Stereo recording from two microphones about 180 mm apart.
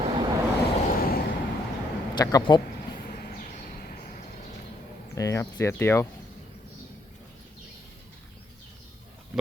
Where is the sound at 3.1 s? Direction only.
55° left (ahead or behind).